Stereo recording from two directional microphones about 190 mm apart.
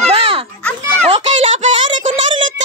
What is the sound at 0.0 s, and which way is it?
Children playing, 30° right (ahead or behind).